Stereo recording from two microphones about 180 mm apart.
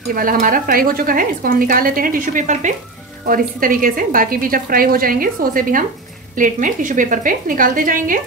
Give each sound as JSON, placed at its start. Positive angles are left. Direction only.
{"t": 0.1, "sound": "speech", "side_deg": -50}